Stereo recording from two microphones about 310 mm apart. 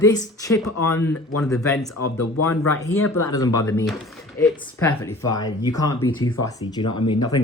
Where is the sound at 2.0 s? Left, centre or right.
Left.